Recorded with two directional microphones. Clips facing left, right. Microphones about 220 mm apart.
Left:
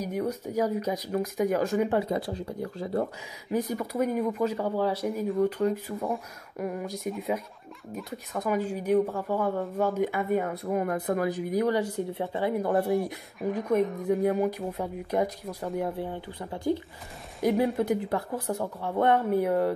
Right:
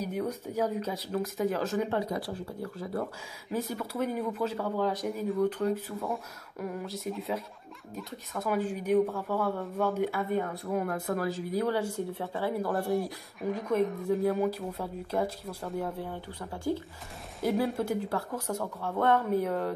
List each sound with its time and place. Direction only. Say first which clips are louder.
0.0 s speech: left 3 dB; 10° left (ahead or behind)
2.0 s speech: left 4 dB; 25° left (ahead or behind)
3.5 s speech: left 4 dB; 15° left (ahead or behind)
8.4 s speech: left 2 dB; 10° left (ahead or behind)
10.5 s speech: left 3 dB; centre (ahead or behind)
10.9 s speech: left 4 dB; 15° left (ahead or behind)
12.7 s speech: left 4 dB; centre (ahead or behind)
14.0 s speech: left 2 dB; 15° left (ahead or behind)